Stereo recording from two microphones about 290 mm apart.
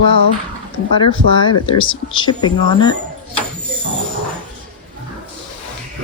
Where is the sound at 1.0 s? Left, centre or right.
Centre.